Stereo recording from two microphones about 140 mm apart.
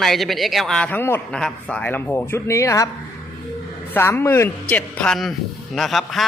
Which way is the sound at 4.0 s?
15° left (ahead or behind).